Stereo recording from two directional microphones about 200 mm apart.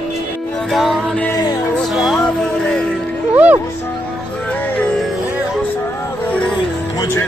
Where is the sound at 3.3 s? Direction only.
10° right (ahead or behind).